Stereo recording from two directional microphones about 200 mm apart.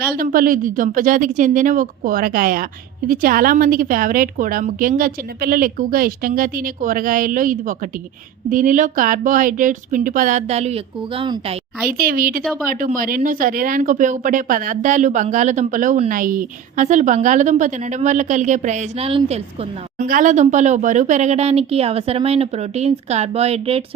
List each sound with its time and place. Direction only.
0.2 s a woman's voice: 45° right (ahead or behind); by 11.6 s 25° right (ahead or behind)
11.9 s a woman's voice: 45° right (ahead or behind); by 23.8 s 30° right (ahead or behind)